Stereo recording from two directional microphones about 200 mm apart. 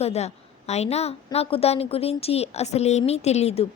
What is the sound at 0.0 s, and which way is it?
A woman's voice, 30° left (ahead or behind).